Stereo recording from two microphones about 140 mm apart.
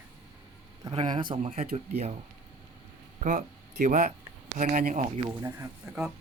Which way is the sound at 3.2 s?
70° right (ahead or behind).